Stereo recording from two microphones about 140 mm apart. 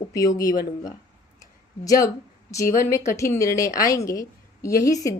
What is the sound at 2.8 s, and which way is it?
A woman's voice, 20° left (ahead or behind).